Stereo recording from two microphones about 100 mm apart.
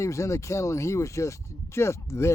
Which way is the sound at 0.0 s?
30° left (ahead or behind).